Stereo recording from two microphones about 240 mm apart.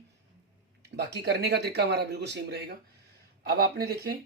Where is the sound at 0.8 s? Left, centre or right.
Right.